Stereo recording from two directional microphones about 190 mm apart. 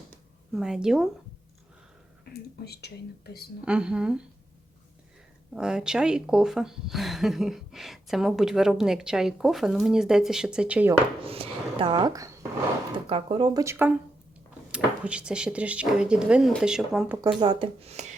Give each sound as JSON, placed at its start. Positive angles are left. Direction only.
{"t": 0.5, "sound": "speech", "side_deg": -5}
{"t": 2.3, "sound": "speech", "side_deg": 60}
{"t": 3.7, "sound": "speech", "side_deg": -5}
{"t": 5.5, "sound": "speech", "side_deg": -5}
{"t": 11.2, "sound": "speech", "side_deg": -30}
{"t": 13.1, "sound": "speech", "side_deg": -30}
{"t": 17.2, "sound": "speech", "side_deg": -25}